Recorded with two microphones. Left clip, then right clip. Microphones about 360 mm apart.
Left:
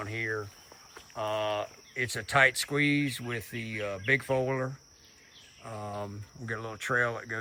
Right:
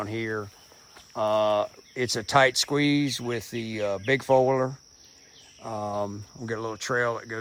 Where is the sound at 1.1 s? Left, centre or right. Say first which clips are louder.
Right 8 dB; centre.